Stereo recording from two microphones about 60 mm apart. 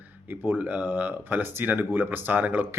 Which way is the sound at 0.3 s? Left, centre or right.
Right.